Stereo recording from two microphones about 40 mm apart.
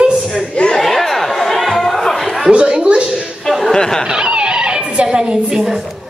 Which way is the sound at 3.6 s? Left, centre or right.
Centre.